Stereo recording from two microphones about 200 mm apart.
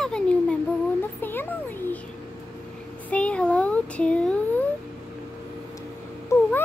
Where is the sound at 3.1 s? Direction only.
5° left (ahead or behind).